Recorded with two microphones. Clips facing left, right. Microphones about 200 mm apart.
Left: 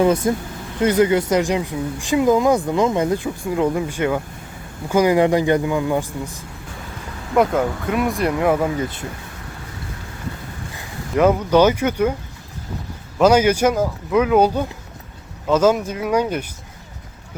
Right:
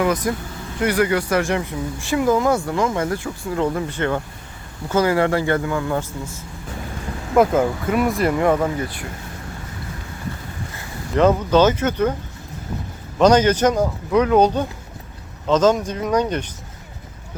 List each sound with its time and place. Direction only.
0.0 s speech: 25° left (ahead or behind)
7.3 s speech: 5° right (ahead or behind)
8.8 s speech: 25° left (ahead or behind)
10.8 s speech: 10° left (ahead or behind)
13.1 s speech: 5° left (ahead or behind)